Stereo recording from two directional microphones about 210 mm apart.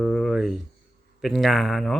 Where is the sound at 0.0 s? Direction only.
Centre (ahead or behind).